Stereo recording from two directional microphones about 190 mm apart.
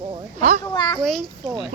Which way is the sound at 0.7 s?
25° left (ahead or behind).